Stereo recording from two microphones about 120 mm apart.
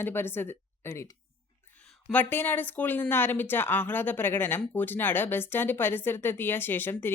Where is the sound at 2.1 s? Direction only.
15° left (ahead or behind).